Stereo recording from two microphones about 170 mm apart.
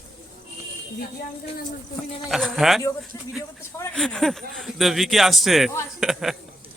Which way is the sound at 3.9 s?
5° left (ahead or behind).